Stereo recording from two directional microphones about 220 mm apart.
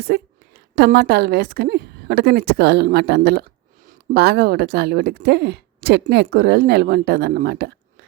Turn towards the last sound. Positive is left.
turn(degrees=-45)  # may be behind; listen again after turning